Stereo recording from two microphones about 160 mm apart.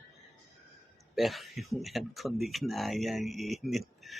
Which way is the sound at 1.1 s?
Centre (ahead or behind).